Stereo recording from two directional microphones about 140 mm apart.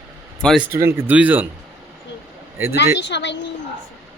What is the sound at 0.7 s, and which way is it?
Speech, 15° right (ahead or behind).